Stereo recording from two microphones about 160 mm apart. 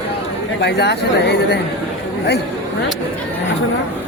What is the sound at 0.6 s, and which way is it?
Speech, 90° left.